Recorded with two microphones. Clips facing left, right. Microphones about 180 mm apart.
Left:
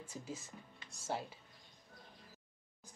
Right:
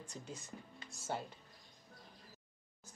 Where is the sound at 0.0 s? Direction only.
5° left (ahead or behind).